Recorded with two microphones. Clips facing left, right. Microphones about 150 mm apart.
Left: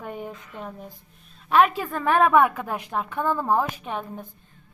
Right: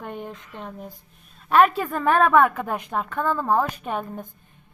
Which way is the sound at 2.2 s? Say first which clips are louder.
Even; 15° left (ahead or behind).